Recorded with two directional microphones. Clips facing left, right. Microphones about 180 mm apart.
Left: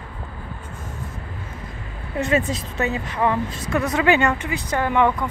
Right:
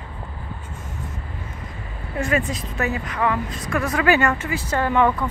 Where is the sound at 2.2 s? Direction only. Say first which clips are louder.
Left 2 dB; 25° left (ahead or behind).